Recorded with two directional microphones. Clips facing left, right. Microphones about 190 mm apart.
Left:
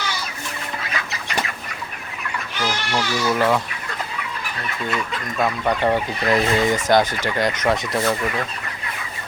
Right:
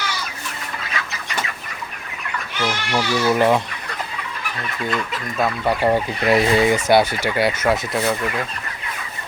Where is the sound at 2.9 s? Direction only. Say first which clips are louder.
Right 4 dB; 15° right (ahead or behind).